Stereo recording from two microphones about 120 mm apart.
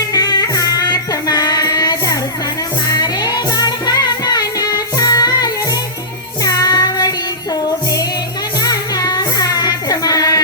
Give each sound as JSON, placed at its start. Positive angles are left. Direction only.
{"t": 0.1, "sound": "music", "side_deg": 35}
{"t": 6.4, "sound": "child singing", "side_deg": 30}
{"t": 8.6, "sound": "music", "side_deg": 30}